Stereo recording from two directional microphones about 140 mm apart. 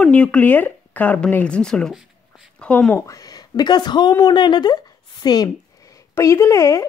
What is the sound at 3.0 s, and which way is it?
A woman's voice, 25° left (ahead or behind).